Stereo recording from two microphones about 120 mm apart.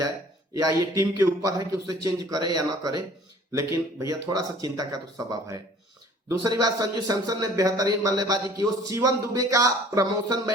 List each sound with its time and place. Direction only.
0.5 s speech: 30° right (ahead or behind)
6.7 s speech: 30° right (ahead or behind)